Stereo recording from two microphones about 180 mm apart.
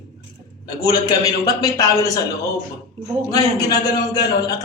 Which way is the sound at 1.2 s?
20° left (ahead or behind).